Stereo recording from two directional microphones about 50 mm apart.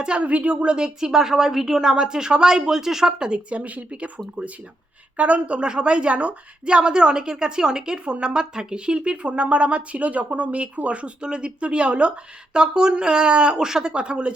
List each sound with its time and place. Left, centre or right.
0.0 s a woman's voice: right
0.9 s a woman's voice: centre; by 4.1 s right
5.1 s a woman's voice: right